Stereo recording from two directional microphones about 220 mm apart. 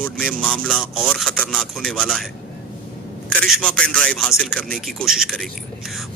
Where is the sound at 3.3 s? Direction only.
5° left (ahead or behind).